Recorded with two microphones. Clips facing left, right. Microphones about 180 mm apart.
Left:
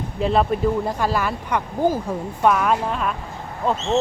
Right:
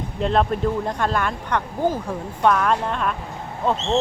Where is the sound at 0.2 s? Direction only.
5° left (ahead or behind).